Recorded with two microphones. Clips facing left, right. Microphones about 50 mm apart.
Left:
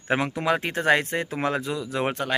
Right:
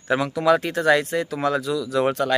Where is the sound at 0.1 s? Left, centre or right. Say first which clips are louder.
Right 5 dB; left.